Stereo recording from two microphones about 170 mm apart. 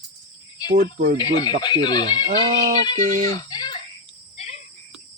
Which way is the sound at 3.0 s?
45° right (ahead or behind).